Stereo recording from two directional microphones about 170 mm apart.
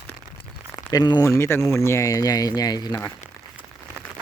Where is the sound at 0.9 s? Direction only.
25° left (ahead or behind).